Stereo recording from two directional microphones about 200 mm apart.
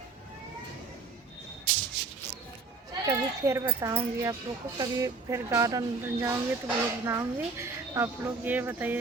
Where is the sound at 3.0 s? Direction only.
15° right (ahead or behind).